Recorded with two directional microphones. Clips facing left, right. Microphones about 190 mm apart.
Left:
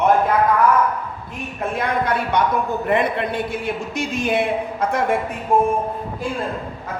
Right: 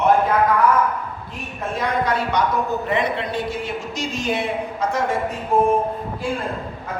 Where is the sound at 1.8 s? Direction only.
55° left (ahead or behind).